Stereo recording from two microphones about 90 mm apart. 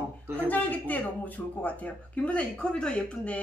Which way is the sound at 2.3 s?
10° left (ahead or behind).